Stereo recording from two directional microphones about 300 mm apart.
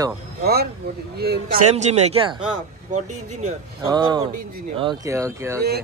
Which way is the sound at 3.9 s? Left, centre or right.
Centre.